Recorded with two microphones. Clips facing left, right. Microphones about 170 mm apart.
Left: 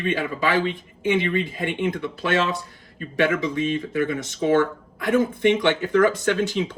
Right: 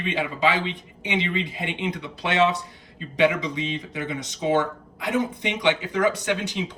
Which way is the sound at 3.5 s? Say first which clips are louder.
Left 6 dB; 50° left (ahead or behind).